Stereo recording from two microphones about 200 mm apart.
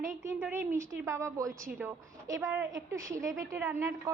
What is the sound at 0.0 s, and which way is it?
A woman's voice, 15° right (ahead or behind).